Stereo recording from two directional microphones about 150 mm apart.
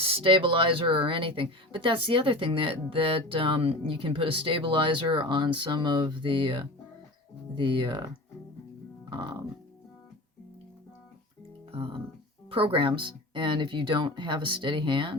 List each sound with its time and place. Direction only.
0.0 s speech: 40° right (ahead or behind)
9.0 s music: 30° right (ahead or behind)
11.7 s speech: 35° right (ahead or behind)